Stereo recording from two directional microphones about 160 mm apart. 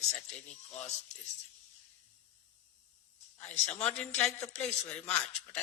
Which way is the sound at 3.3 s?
10° left (ahead or behind).